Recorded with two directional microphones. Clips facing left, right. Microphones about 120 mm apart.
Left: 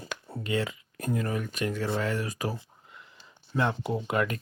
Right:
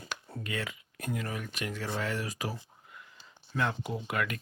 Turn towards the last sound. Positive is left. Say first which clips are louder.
# left 5 dB
turn(degrees=30)  # may be behind; listen again after turning